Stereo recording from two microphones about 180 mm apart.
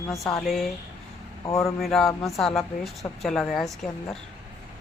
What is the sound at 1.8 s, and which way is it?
A woman's voice, centre (ahead or behind).